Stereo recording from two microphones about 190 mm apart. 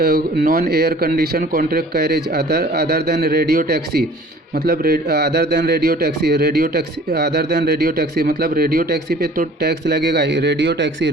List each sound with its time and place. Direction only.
0.0 s a man's voice: 55° right (ahead or behind)